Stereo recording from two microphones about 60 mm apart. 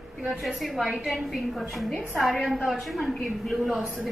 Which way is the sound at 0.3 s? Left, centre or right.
Centre.